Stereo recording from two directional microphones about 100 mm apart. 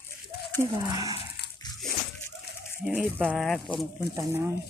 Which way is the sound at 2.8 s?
15° right (ahead or behind).